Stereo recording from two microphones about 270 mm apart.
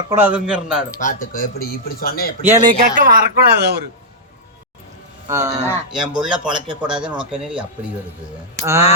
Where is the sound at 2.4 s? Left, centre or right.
Centre.